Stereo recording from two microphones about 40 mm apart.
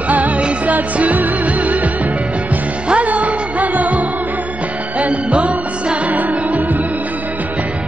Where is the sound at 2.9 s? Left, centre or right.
Right.